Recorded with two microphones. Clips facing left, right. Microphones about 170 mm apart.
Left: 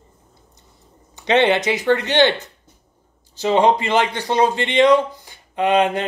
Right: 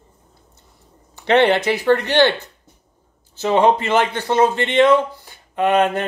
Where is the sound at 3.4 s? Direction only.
55° right (ahead or behind).